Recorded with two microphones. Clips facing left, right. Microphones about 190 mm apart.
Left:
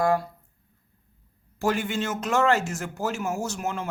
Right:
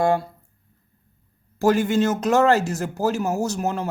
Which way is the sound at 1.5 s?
40° right (ahead or behind).